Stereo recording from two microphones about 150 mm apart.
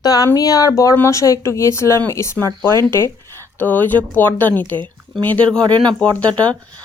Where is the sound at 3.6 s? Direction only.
10° left (ahead or behind).